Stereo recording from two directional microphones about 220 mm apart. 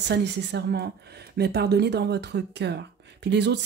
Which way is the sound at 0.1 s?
50° right (ahead or behind).